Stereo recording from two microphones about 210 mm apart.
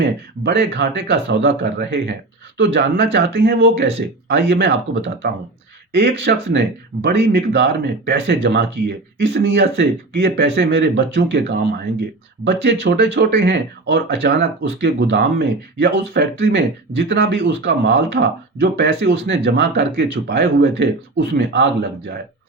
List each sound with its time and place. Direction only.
0.0 s speech: 50° right (ahead or behind)